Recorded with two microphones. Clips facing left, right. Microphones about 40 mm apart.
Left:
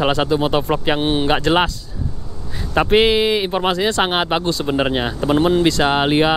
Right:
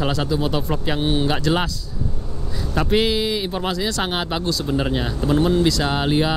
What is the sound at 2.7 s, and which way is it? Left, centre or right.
Speech, left.